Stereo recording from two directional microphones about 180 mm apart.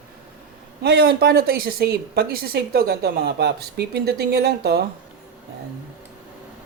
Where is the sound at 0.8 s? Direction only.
65° right (ahead or behind).